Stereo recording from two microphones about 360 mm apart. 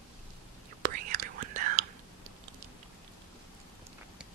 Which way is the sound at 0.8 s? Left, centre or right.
Right.